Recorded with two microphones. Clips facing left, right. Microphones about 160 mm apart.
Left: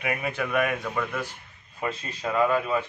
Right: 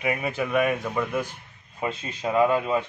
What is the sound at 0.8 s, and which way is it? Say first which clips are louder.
A man's voice: right 3 dB; 15° right (ahead or behind).